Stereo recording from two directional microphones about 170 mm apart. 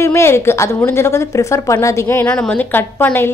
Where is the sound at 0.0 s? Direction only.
15° left (ahead or behind).